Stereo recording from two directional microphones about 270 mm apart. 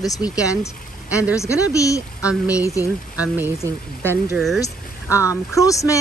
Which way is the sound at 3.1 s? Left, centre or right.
Centre.